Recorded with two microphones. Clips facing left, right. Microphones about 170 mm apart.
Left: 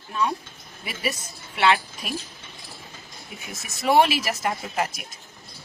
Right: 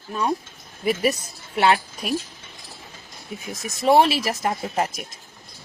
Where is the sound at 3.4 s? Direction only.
35° right (ahead or behind).